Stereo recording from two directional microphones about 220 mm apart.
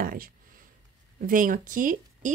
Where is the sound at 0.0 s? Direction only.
40° right (ahead or behind).